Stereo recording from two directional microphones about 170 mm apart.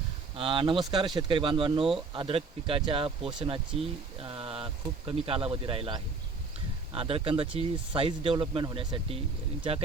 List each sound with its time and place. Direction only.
0.3 s speech: 30° right (ahead or behind)